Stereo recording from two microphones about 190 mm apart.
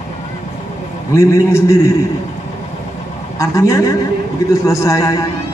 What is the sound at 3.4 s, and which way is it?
Speech, 15° left (ahead or behind).